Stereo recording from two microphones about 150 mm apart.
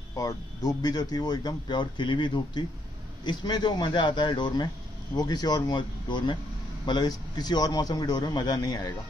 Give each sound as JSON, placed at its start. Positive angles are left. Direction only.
{"t": 0.1, "sound": "a man's voice", "side_deg": 20}